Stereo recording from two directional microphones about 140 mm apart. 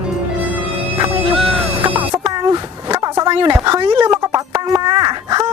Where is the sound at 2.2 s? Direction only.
30° right (ahead or behind).